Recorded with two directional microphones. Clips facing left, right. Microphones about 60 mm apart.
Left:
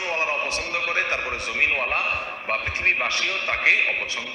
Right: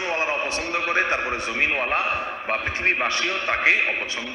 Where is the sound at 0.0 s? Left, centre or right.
Right.